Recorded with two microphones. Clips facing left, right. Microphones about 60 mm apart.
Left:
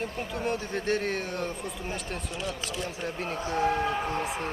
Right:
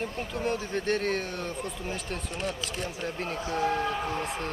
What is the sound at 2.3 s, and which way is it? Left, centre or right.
Speech, right.